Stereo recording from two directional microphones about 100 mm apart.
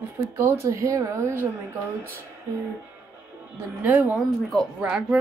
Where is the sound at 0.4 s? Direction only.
25° right (ahead or behind).